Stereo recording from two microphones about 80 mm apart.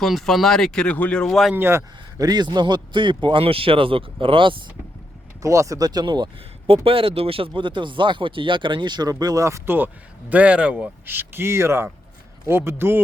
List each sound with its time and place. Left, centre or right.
0.0 s speech: centre
1.5 s speech: right
2.1 s a man's voice: right
5.4 s speech: right
7.5 s a man's voice: right
9.7 s speech: right
11.0 s speech: right